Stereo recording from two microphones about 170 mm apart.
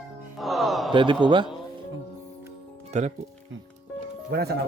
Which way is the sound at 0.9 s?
30° right (ahead or behind).